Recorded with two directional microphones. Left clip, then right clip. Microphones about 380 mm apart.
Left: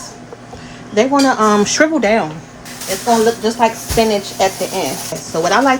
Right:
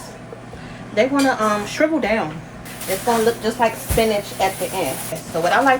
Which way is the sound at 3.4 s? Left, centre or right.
Left.